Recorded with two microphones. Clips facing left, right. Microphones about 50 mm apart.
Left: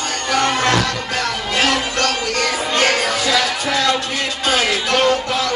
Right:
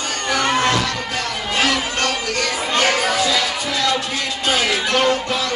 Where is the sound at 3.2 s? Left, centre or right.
Left.